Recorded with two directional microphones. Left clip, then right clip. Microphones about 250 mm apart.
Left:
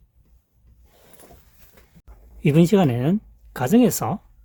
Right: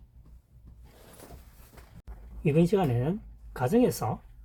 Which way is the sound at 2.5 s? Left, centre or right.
Left.